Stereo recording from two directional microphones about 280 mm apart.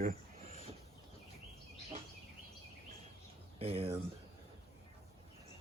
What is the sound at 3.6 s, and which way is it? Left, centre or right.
Speech, right.